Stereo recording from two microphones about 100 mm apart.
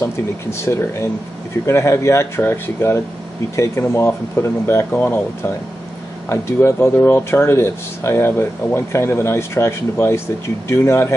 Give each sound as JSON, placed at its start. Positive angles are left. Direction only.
{"t": 0.0, "sound": "speech", "side_deg": 25}
{"t": 6.2, "sound": "speech", "side_deg": 25}